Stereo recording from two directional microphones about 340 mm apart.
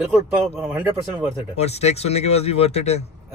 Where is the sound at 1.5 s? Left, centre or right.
Centre.